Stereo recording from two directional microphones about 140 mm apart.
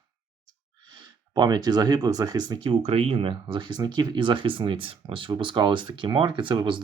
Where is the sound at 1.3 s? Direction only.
30° right (ahead or behind).